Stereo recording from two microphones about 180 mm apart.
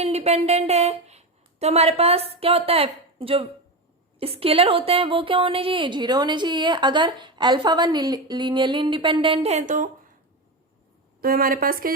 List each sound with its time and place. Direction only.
0.0 s a woman's voice: 35° right (ahead or behind)
11.2 s a woman's voice: 55° right (ahead or behind)